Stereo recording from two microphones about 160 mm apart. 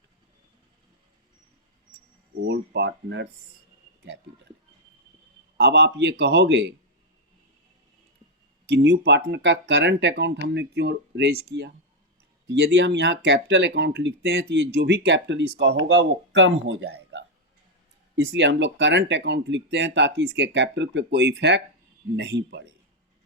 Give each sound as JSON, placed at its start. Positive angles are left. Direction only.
{"t": 2.4, "sound": "speech", "side_deg": -90}
{"t": 5.5, "sound": "speech", "side_deg": -90}
{"t": 8.7, "sound": "speech", "side_deg": -90}
{"t": 18.2, "sound": "speech", "side_deg": -90}